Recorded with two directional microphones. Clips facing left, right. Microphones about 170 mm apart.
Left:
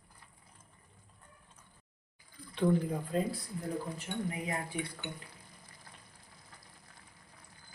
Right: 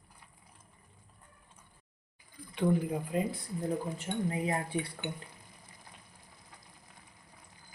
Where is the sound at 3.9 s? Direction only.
25° right (ahead or behind).